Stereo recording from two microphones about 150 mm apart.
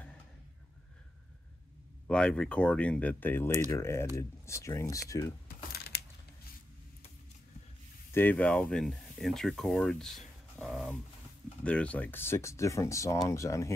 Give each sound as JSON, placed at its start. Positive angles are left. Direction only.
{"t": 2.0, "sound": "speech", "side_deg": 5}
{"t": 5.7, "sound": "a sound", "side_deg": 90}
{"t": 8.1, "sound": "speech", "side_deg": 15}